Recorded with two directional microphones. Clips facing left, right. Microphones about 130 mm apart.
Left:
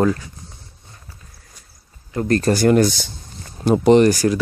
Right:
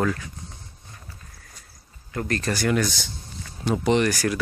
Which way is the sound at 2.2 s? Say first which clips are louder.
Left 9 dB; 35° left (ahead or behind).